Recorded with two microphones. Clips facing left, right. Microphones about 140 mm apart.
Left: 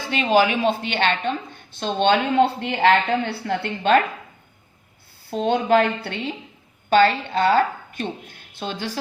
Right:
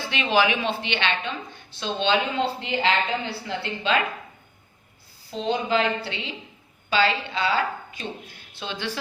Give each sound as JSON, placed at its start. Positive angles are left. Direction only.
{"t": 0.1, "sound": "a woman's voice", "side_deg": 40}
{"t": 5.3, "sound": "a woman's voice", "side_deg": 55}